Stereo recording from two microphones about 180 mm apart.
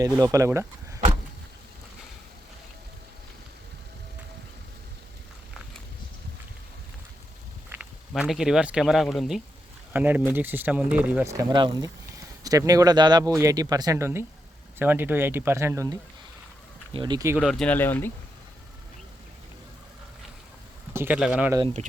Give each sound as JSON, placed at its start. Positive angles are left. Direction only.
{"t": 0.0, "sound": "speech", "side_deg": -20}
{"t": 7.7, "sound": "speech", "side_deg": -5}
{"t": 17.4, "sound": "speech", "side_deg": 5}
{"t": 20.9, "sound": "speech", "side_deg": -10}